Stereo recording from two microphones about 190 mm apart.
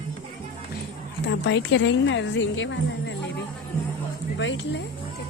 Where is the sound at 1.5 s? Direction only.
70° left (ahead or behind).